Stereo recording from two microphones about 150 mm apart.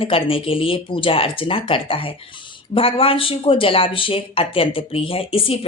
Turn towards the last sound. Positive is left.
turn(degrees=40)  # may be behind; listen again after turning